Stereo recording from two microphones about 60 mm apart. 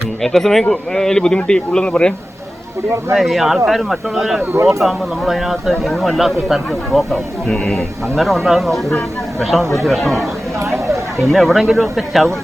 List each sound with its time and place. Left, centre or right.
0.2 s speech: centre
3.2 s speech: centre
10.6 s speech: right
11.2 s speech: centre